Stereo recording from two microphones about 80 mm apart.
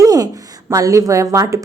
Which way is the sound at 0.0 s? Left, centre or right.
Right.